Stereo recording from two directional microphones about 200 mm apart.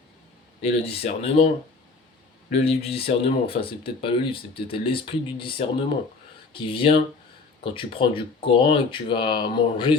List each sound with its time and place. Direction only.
0.6 s speech: 30° left (ahead or behind)
2.5 s speech: 30° left (ahead or behind)